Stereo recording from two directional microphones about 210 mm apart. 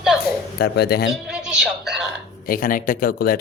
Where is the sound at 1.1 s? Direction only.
5° right (ahead or behind).